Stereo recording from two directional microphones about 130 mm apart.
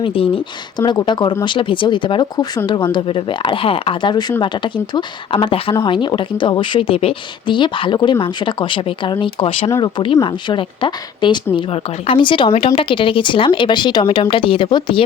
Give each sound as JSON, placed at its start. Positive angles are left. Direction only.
{"t": 0.0, "sound": "speech", "side_deg": 45}
{"t": 0.8, "sound": "speech", "side_deg": 35}
{"t": 9.6, "sound": "speech", "side_deg": 25}
{"t": 10.2, "sound": "speech", "side_deg": 40}